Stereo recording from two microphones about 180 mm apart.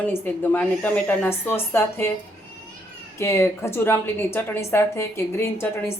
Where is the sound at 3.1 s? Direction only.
15° left (ahead or behind).